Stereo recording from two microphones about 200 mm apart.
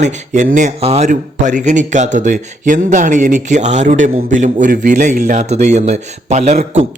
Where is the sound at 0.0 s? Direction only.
40° right (ahead or behind).